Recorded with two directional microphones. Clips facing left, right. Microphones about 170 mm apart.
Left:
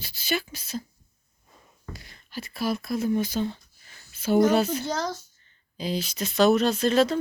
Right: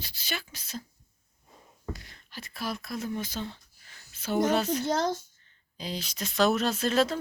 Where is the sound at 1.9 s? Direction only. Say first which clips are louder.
Left 7 dB; 10° left (ahead or behind).